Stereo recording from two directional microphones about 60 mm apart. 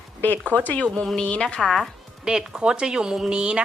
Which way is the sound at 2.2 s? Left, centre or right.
Centre.